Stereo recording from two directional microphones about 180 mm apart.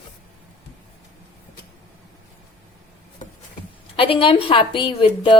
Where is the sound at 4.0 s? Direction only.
30° left (ahead or behind).